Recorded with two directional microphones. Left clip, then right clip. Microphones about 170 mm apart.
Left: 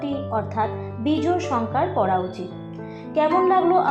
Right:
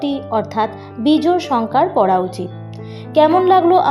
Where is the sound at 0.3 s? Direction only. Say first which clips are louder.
Right 6 dB; 25° right (ahead or behind).